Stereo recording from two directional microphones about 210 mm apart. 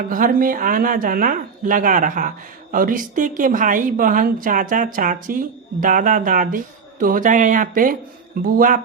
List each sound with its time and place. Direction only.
0.1 s a woman's voice: 40° right (ahead or behind)